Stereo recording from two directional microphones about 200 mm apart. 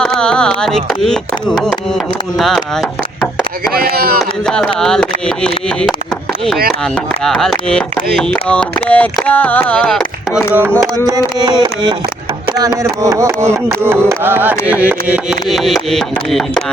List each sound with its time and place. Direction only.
0.0 s a sound: 5° left (ahead or behind)
2.4 s speech: centre (ahead or behind)
3.8 s speech: 50° right (ahead or behind)
4.2 s speech: 5° left (ahead or behind)
6.9 s speech: centre (ahead or behind)
10.5 s music: 10° right (ahead or behind)
14.7 s speech: 10° right (ahead or behind)